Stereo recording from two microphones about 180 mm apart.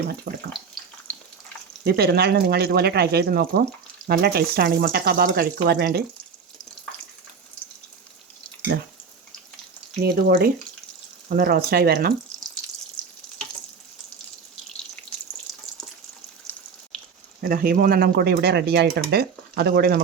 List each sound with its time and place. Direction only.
0.3 s speech: 70° right (ahead or behind)
1.1 s frying: 10° left (ahead or behind)
1.8 s speech: 60° right (ahead or behind)
8.7 s speech: 60° right (ahead or behind)
10.0 s speech: 60° right (ahead or behind)
17.4 s speech: 50° right (ahead or behind)